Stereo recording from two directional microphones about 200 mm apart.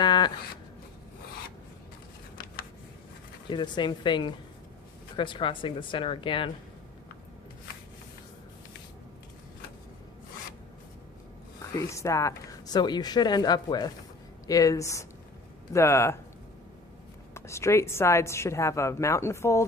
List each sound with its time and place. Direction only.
0.0 s a sound: 20° left (ahead or behind)
3.5 s speech: 25° left (ahead or behind)
11.9 s a woman's voice: 15° left (ahead or behind)
17.3 s a woman's voice: 15° left (ahead or behind)